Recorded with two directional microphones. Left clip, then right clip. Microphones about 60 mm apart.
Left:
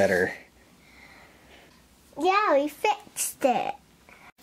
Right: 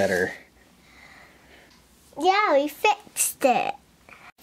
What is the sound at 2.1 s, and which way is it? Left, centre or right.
A child's voice, right.